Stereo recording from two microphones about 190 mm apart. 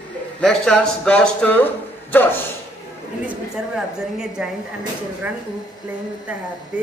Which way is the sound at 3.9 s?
5° right (ahead or behind).